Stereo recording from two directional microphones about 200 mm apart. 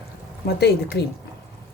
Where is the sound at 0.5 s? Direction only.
55° left (ahead or behind).